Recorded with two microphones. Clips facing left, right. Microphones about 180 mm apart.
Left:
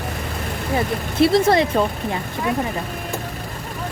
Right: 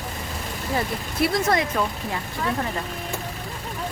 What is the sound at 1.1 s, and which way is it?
Speech, 30° left (ahead or behind).